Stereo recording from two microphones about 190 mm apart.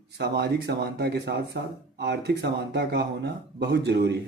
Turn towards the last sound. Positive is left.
turn(degrees=-65)  # may be behind; listen again after turning